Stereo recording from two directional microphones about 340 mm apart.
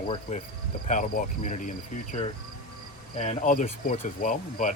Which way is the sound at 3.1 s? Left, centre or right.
Centre.